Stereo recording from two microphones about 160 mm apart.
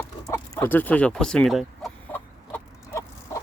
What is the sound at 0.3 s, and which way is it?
Speech, 15° left (ahead or behind).